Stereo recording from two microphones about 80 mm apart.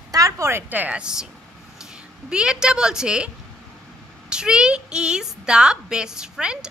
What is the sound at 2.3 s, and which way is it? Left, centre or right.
A woman's voice, centre.